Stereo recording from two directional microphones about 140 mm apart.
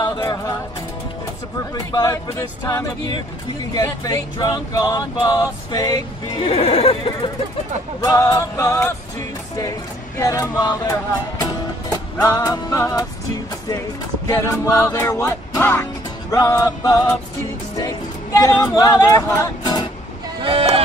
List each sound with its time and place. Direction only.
0.0 s music: 30° left (ahead or behind)
1.9 s music: 25° left (ahead or behind)
6.4 s speech: 50° left (ahead or behind)
8.0 s music: 25° left (ahead or behind)
9.6 s speech: 25° left (ahead or behind)
10.6 s music: 30° left (ahead or behind)
12.2 s music: 25° left (ahead or behind)
14.2 s music: 20° left (ahead or behind)
20.4 s music: 40° right (ahead or behind)